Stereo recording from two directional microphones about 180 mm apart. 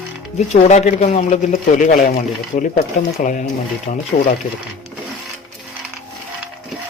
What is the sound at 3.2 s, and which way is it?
Speech, 45° left (ahead or behind).